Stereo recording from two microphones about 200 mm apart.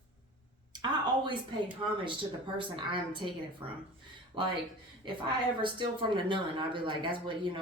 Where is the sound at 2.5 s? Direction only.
25° right (ahead or behind).